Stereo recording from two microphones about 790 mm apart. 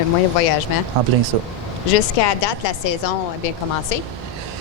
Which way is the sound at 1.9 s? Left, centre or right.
Left.